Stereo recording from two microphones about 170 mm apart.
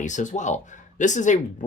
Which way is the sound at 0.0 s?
45° left (ahead or behind).